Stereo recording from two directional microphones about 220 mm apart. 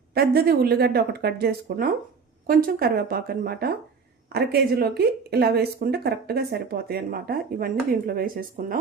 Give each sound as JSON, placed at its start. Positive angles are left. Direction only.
{"t": 0.1, "sound": "speech", "side_deg": -45}